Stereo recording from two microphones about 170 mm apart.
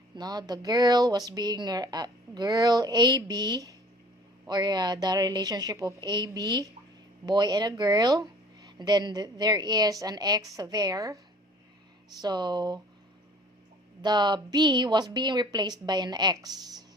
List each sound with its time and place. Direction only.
0.2 s speech: 25° right (ahead or behind)
12.2 s speech: 25° right (ahead or behind)
14.0 s speech: 25° right (ahead or behind)